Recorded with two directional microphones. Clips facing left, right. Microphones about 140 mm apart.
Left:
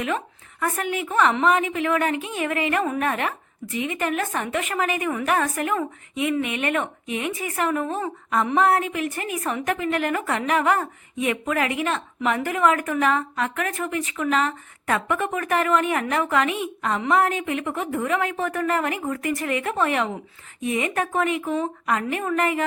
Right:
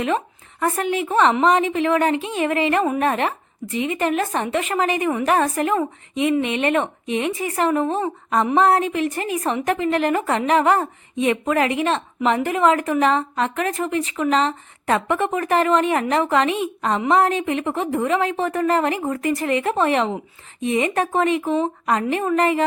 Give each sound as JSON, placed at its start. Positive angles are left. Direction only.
{"t": 0.6, "sound": "a woman's voice", "side_deg": -30}